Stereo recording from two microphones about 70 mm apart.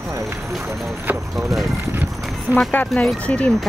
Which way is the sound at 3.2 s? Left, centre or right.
Centre.